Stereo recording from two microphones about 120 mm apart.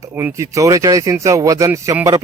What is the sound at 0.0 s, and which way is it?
Speech, 20° right (ahead or behind).